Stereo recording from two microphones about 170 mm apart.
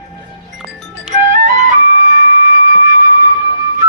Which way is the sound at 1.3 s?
50° right (ahead or behind).